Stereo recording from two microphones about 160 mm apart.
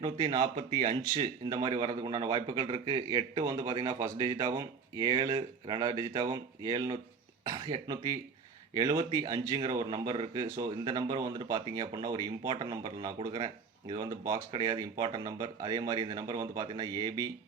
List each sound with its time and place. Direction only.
0.0 s a man's voice: 30° right (ahead or behind)